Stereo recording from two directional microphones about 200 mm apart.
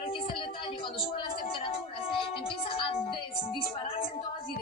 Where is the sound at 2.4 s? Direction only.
30° left (ahead or behind).